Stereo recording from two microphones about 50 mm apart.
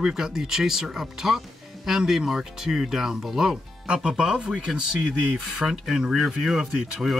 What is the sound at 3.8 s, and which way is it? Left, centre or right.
Speech, right.